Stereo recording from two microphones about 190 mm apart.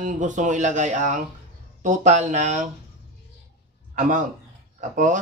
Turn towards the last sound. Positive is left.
turn(degrees=-40)  # may be behind; listen again after turning